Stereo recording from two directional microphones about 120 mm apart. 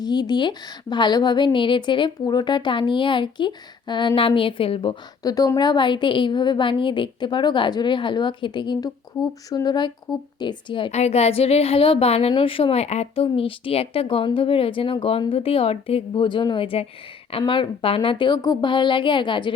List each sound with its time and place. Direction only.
0.0 s a woman's voice: 35° left (ahead or behind)
5.2 s a woman's voice: 30° left (ahead or behind)
10.9 s a woman's voice: 65° left (ahead or behind); by 19.5 s 40° left (ahead or behind)